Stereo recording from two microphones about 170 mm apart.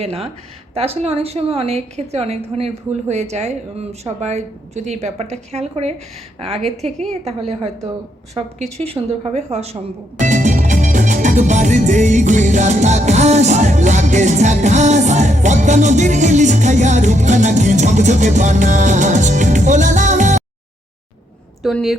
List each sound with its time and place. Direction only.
0.0 s speech: 35° right (ahead or behind)
7.1 s speech: 40° right (ahead or behind)
10.2 s music: 45° right (ahead or behind)
21.6 s a woman's voice: centre (ahead or behind)